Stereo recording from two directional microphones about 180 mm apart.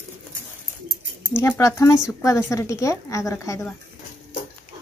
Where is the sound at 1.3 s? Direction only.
15° left (ahead or behind).